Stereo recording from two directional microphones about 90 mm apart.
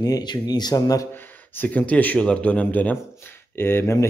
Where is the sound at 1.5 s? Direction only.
20° left (ahead or behind).